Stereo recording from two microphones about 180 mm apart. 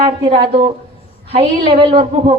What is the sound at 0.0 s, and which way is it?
A woman's voice, 35° right (ahead or behind).